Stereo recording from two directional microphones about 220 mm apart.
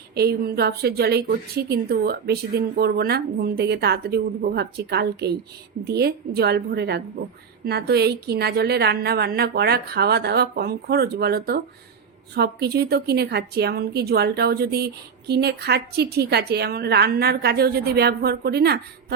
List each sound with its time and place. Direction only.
0.1 s a woman's voice: 45° right (ahead or behind)